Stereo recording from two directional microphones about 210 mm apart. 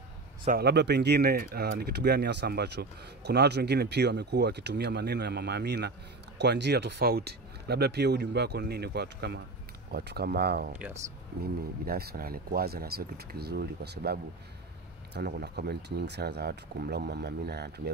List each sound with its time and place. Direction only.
0.5 s speech: 50° right (ahead or behind)
11.8 s speech: 45° right (ahead or behind)